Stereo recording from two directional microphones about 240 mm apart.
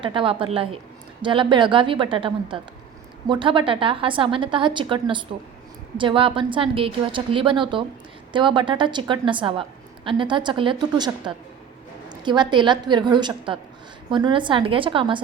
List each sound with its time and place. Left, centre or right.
0.0 s a woman's voice: right